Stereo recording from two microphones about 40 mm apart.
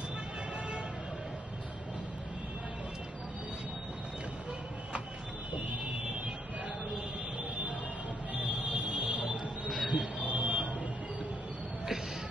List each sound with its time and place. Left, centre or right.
8.4 s music: right
9.8 s a sound: centre
10.1 s vehicle: right